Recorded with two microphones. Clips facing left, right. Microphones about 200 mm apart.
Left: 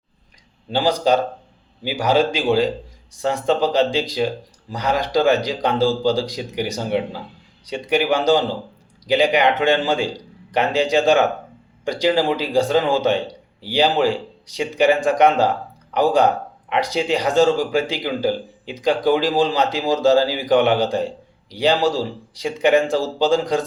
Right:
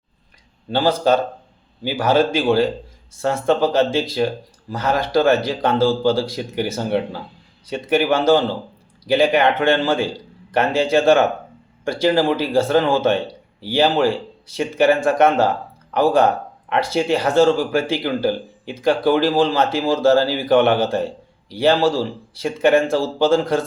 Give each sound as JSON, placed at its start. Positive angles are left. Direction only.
{"t": 0.7, "sound": "speech", "side_deg": 15}